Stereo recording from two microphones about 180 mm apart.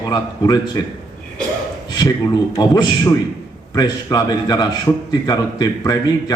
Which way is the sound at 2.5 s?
20° left (ahead or behind).